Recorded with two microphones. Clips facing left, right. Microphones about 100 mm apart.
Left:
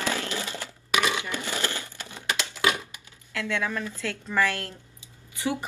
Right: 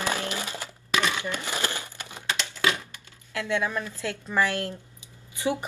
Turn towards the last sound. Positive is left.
turn(degrees=-20)  # may be behind; listen again after turning